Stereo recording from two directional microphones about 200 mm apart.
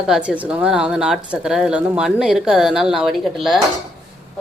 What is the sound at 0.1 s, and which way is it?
A woman's voice, 5° right (ahead or behind).